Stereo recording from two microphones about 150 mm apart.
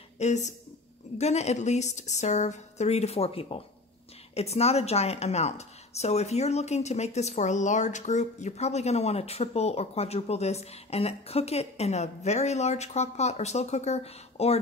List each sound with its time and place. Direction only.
0.2 s a woman's voice: 50° left (ahead or behind)